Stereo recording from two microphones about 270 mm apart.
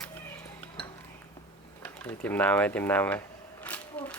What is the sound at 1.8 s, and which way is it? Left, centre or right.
Speech, centre.